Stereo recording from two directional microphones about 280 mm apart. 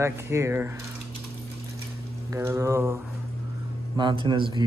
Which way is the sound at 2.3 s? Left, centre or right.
Centre.